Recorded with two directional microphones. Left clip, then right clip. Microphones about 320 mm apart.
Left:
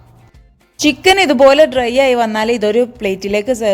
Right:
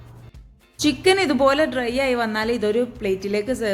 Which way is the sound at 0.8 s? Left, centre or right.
Left.